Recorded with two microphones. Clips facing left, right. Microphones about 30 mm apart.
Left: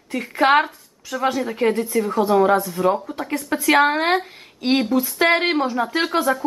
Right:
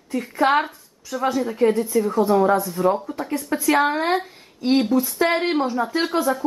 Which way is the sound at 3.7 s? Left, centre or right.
Left.